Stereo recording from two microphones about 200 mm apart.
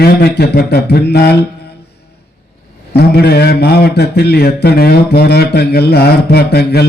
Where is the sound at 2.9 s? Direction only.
55° left (ahead or behind).